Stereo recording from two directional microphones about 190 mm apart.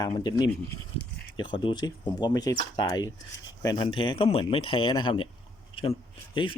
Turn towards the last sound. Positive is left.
turn(degrees=25)  # may be behind; listen again after turning